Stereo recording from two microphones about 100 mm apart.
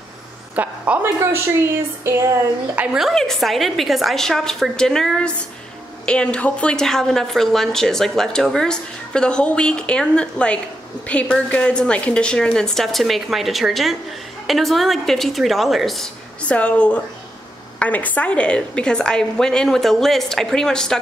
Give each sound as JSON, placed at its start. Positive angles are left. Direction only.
{"t": 0.6, "sound": "a woman's voice", "side_deg": -20}
{"t": 2.7, "sound": "a woman's voice", "side_deg": -15}
{"t": 3.0, "sound": "a woman's voice", "side_deg": 0}
{"t": 16.4, "sound": "a woman's voice", "side_deg": 10}